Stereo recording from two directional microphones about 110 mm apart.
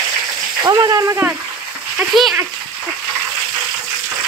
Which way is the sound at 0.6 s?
35° right (ahead or behind).